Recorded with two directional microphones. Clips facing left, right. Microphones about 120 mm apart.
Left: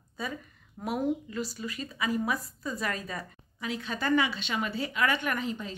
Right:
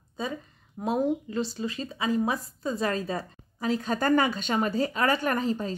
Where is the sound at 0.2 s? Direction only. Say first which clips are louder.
Right 4 dB; 25° right (ahead or behind).